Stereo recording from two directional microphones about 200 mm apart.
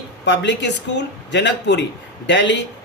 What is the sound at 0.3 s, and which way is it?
A man's voice, 60° left (ahead or behind).